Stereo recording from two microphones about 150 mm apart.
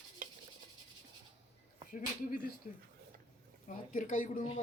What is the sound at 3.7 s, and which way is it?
Speech, 60° left (ahead or behind).